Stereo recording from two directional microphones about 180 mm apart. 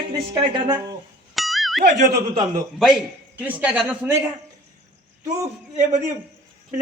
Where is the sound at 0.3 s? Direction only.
20° right (ahead or behind).